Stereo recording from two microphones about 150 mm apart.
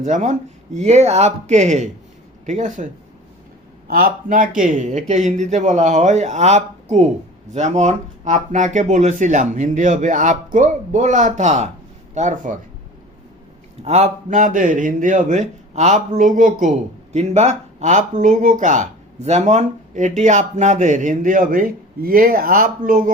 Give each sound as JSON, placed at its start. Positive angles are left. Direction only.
{"t": 0.0, "sound": "a man's voice", "side_deg": -55}
{"t": 3.8, "sound": "a man's voice", "side_deg": -80}
{"t": 13.8, "sound": "a man's voice", "side_deg": -50}